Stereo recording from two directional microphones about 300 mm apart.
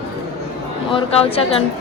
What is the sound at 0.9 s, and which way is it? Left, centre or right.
Speech, centre.